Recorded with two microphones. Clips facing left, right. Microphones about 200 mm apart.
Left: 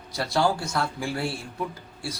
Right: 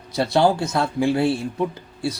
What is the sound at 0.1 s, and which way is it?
A man's voice, 25° right (ahead or behind).